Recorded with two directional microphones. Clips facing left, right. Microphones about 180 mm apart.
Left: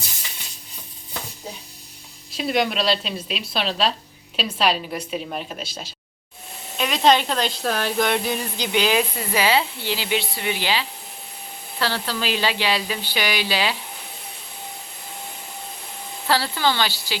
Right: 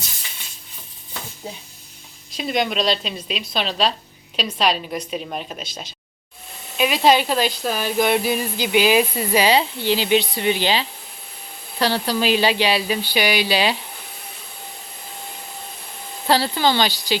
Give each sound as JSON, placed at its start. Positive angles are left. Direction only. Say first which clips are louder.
{"t": 2.3, "sound": "a woman's voice", "louder": "even", "side_deg": 5}
{"t": 6.7, "sound": "speech", "louder": "right 2 dB", "side_deg": -10}
{"t": 16.3, "sound": "speech", "louder": "right 3 dB", "side_deg": -15}